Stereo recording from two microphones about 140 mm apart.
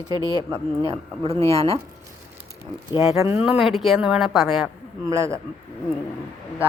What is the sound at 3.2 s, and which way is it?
A woman's voice, 10° right (ahead or behind).